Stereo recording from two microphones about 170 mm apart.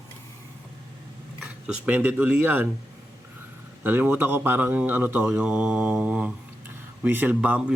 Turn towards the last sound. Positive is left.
turn(degrees=-10)  # may be behind; listen again after turning